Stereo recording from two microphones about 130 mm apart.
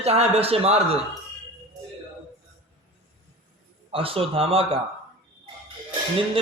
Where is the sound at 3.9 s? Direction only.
45° right (ahead or behind).